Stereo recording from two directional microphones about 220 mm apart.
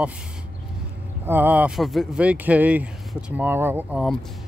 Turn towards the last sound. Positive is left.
turn(degrees=-10)  # may be behind; listen again after turning